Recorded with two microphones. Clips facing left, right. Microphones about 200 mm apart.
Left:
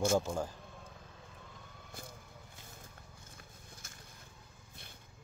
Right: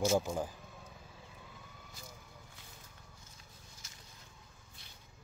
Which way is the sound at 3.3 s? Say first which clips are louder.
Left 4 dB; 55° left (ahead or behind).